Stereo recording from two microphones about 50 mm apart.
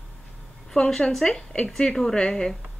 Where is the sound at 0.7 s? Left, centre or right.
Centre.